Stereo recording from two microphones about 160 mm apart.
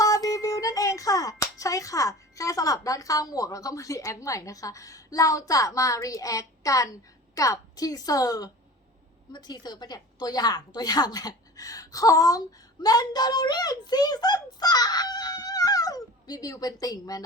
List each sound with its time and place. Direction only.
0.0 s a woman's voice: 20° left (ahead or behind)